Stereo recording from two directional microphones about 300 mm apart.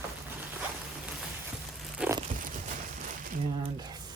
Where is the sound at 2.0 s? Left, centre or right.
Centre.